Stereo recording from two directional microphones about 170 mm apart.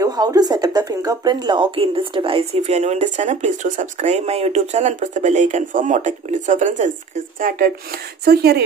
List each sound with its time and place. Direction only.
0.0 s speech: 20° right (ahead or behind); by 8.6 s 70° right (ahead or behind)